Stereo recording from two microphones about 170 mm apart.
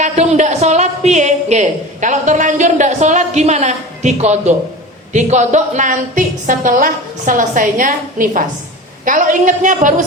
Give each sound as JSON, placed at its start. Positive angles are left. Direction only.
{"t": 0.0, "sound": "a woman's voice", "side_deg": -45}